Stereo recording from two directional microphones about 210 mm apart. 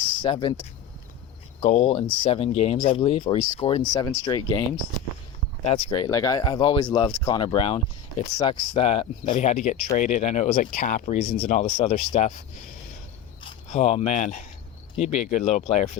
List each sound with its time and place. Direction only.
0.1 s speech: 25° left (ahead or behind)
1.6 s speech: 30° left (ahead or behind)
5.6 s speech: 25° left (ahead or behind)
13.4 s speech: 30° left (ahead or behind)